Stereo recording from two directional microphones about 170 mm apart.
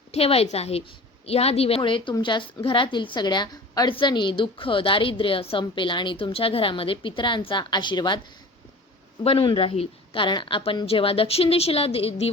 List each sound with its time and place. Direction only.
0.1 s a woman's voice: 35° left (ahead or behind)
9.2 s a woman's voice: 30° left (ahead or behind)